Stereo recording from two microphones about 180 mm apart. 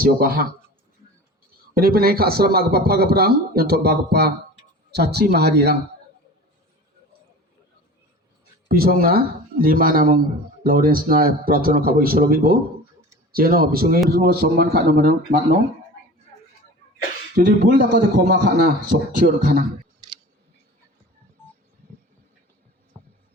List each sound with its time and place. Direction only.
0.0 s a man's voice: 55° right (ahead or behind)
1.7 s a man's voice: 55° right (ahead or behind)
8.6 s a man's voice: 55° right (ahead or behind)
17.3 s a man's voice: 60° right (ahead or behind)